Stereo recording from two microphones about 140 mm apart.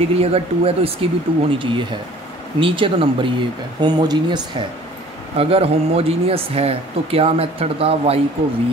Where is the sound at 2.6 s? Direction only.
40° right (ahead or behind).